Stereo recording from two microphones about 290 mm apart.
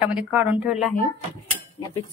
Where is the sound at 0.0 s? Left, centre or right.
Centre.